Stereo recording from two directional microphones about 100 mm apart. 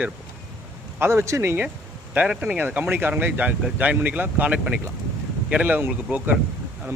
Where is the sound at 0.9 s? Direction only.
25° right (ahead or behind).